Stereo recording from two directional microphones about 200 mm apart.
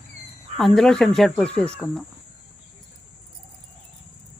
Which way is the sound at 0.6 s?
Centre (ahead or behind).